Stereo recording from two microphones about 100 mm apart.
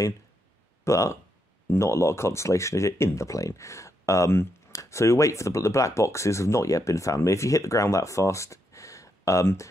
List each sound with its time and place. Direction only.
0.8 s speech: 30° left (ahead or behind)